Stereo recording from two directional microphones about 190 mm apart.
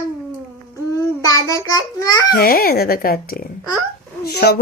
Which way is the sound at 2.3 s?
50° left (ahead or behind).